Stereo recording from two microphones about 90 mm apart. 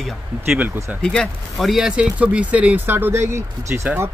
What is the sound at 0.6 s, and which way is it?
Speech, 30° right (ahead or behind).